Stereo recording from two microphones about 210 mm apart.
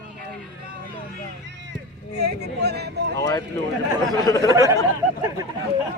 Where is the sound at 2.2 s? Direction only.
50° right (ahead or behind).